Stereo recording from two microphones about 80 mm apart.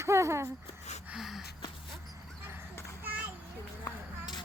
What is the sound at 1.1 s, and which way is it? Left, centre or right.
Gasp, centre.